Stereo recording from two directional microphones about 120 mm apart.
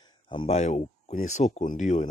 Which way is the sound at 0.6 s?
70° left (ahead or behind).